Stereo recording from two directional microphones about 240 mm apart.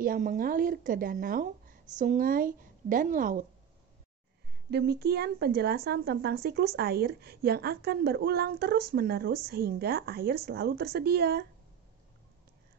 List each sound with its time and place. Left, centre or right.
0.0 s a woman's voice: right
4.6 s a woman's voice: right